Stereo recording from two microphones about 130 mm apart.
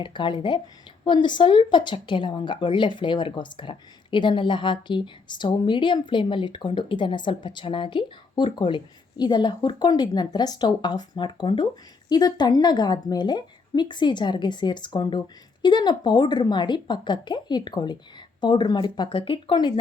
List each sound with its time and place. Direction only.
0.0 s a woman's voice: 40° left (ahead or behind)